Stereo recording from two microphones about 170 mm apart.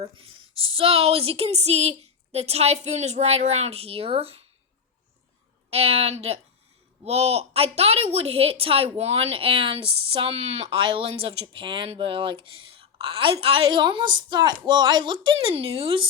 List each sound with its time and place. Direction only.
0.2 s a woman's voice: 30° right (ahead or behind)
5.7 s a woman's voice: 35° right (ahead or behind)